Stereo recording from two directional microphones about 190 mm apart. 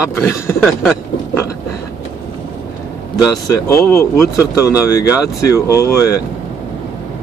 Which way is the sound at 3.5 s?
15° left (ahead or behind).